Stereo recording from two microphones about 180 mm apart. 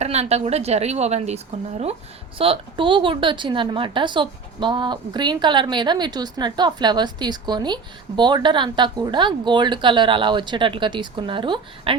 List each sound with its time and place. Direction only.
0.0 s a woman's voice: 35° right (ahead or behind)
2.4 s a woman's voice: 30° right (ahead or behind)